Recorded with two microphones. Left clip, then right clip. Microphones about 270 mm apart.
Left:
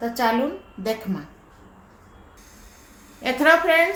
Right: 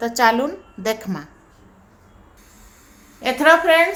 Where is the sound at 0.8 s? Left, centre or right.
Right.